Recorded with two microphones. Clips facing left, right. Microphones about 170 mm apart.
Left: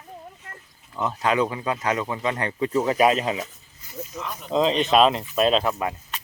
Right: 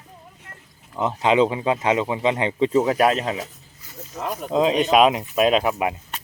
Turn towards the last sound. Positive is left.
turn(degrees=-15)  # may be behind; listen again after turning